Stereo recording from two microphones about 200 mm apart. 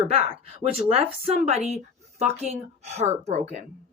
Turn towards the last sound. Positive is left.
turn(degrees=-40)  # may be behind; listen again after turning